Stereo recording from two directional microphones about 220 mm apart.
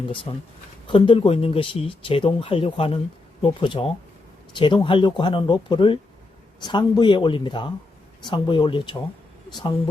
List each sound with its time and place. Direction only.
0.9 s speech: 25° left (ahead or behind)